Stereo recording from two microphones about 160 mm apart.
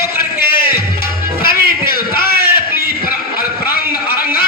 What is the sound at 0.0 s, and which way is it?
Music, 70° left (ahead or behind).